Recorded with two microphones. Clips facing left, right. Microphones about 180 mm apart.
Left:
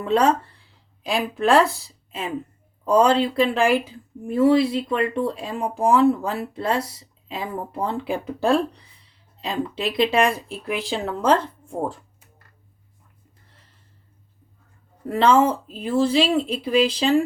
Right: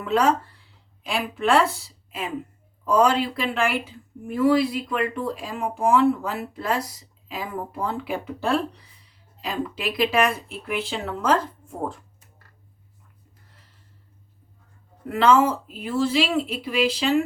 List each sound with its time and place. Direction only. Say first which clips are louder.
0.0 s speech: left 2 dB; 30° left (ahead or behind)
2.8 s speech: left 3 dB; 30° left (ahead or behind)
15.1 s speech: left 1 dB; 30° left (ahead or behind)